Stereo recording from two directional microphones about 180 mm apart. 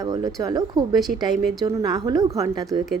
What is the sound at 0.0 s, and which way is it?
A woman's voice, 20° right (ahead or behind).